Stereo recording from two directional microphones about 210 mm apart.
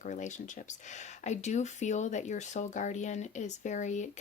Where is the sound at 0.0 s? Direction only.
35° left (ahead or behind).